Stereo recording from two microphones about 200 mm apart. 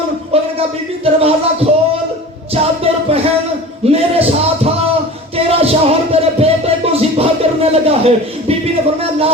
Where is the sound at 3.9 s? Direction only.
30° right (ahead or behind).